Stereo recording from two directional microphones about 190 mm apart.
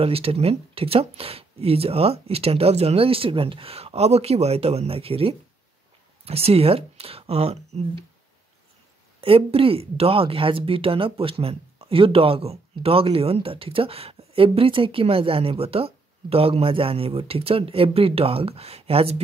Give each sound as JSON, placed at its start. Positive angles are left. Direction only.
{"t": 0.0, "sound": "speech", "side_deg": -30}
{"t": 9.2, "sound": "speech", "side_deg": -30}